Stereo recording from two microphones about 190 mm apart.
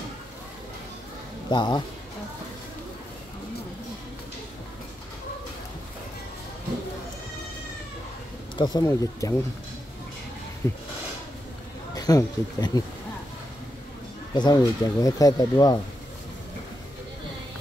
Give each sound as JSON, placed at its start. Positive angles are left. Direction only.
{"t": 1.5, "sound": "speech", "side_deg": 25}
{"t": 8.5, "sound": "speech", "side_deg": 20}
{"t": 10.6, "sound": "speech", "side_deg": 15}
{"t": 11.9, "sound": "speech", "side_deg": 20}
{"t": 14.3, "sound": "speech", "side_deg": 20}